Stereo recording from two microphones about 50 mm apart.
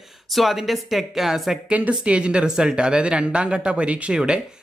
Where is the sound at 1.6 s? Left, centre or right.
Right.